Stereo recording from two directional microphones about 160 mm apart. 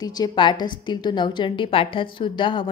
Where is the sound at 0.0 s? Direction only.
25° left (ahead or behind).